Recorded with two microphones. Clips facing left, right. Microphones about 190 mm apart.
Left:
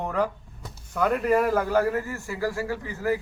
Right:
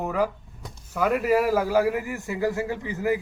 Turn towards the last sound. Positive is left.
turn(degrees=-20)  # may be behind; listen again after turning